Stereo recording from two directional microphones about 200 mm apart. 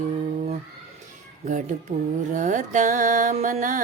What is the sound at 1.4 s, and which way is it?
Mantra, 40° right (ahead or behind).